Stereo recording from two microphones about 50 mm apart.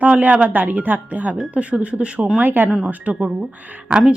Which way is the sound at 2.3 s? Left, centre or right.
Right.